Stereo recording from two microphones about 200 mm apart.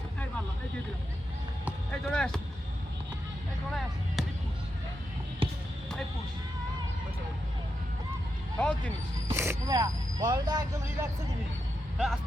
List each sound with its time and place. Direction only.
1.9 s speech: 5° left (ahead or behind)
3.8 s a sound: centre (ahead or behind)
5.4 s basketball bounce: 25° right (ahead or behind)
8.5 s speech: 5° left (ahead or behind)
9.3 s speech: 10° right (ahead or behind)
11.9 s speech: centre (ahead or behind)